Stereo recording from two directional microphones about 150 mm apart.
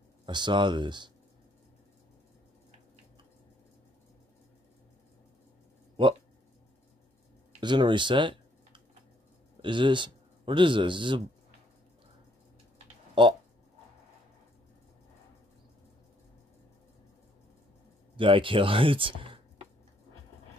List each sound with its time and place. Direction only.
0.2 s speech: 30° right (ahead or behind)
7.6 s speech: 30° right (ahead or behind)
12.7 s a sound: 35° right (ahead or behind)
18.1 s speech: 35° right (ahead or behind)